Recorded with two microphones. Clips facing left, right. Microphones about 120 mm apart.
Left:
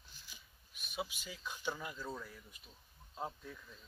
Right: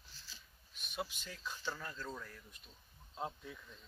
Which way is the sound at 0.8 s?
5° left (ahead or behind).